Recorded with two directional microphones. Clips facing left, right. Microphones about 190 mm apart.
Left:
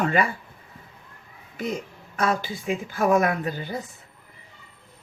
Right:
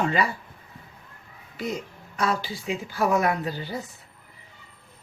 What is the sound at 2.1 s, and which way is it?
A woman's voice, 50° left (ahead or behind).